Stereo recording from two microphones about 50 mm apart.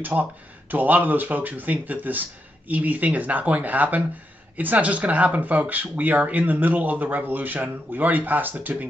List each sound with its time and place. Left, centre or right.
0.0 s speech: right